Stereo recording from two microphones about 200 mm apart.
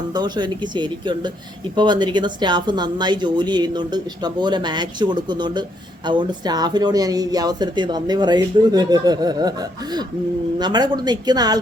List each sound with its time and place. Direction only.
0.1 s speech: 20° right (ahead or behind)